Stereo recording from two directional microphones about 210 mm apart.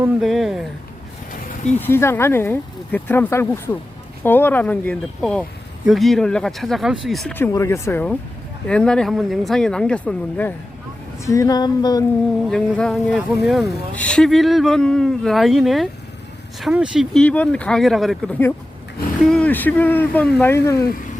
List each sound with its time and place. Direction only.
0.0 s speech: centre (ahead or behind)
1.3 s a sound: 35° left (ahead or behind)
1.8 s speech: 10° left (ahead or behind)
12.5 s speech: 5° left (ahead or behind)